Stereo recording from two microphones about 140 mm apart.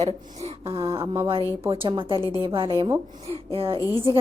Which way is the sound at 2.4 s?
40° right (ahead or behind).